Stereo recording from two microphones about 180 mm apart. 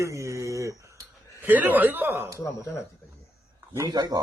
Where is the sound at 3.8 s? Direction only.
20° right (ahead or behind).